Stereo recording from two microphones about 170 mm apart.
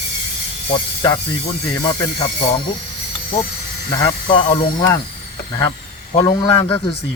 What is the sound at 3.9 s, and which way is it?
Speech, 25° left (ahead or behind).